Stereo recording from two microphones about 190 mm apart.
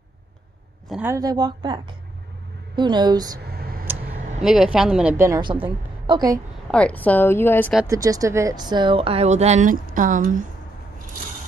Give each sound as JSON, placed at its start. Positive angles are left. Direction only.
{"t": 0.8, "sound": "speech", "side_deg": -5}
{"t": 1.1, "sound": "speech", "side_deg": -20}
{"t": 3.4, "sound": "a sound", "side_deg": -55}
{"t": 4.4, "sound": "a woman's voice", "side_deg": -5}
{"t": 6.7, "sound": "a woman's voice", "side_deg": 5}
{"t": 7.8, "sound": "speech", "side_deg": -15}